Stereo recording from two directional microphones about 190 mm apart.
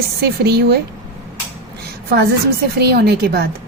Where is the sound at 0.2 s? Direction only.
60° right (ahead or behind).